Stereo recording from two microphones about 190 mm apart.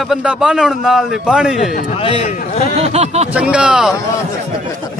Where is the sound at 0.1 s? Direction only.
5° right (ahead or behind).